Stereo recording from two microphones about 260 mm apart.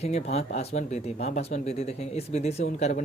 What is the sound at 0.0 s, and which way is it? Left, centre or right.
Speech, left.